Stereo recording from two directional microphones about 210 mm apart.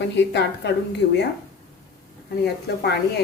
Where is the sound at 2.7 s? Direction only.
50° left (ahead or behind).